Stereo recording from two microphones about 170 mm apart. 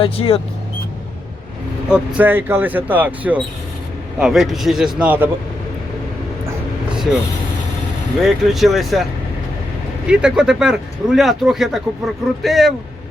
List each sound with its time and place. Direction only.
0.0 s speech: 35° left (ahead or behind)
1.9 s speech: 10° right (ahead or behind)
6.9 s vehicle: 5° right (ahead or behind)
8.2 s speech: centre (ahead or behind)
10.1 s speech: 5° right (ahead or behind)